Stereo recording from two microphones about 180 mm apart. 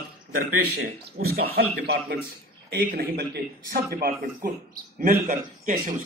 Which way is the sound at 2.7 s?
55° right (ahead or behind).